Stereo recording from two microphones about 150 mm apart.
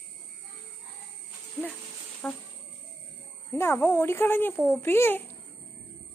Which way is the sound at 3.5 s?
15° left (ahead or behind).